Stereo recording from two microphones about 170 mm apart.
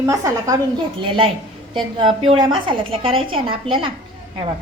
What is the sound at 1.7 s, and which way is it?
A woman's voice, 30° right (ahead or behind).